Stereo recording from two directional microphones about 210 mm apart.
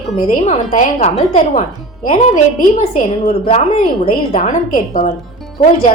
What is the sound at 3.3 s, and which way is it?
A woman's voice, 30° left (ahead or behind).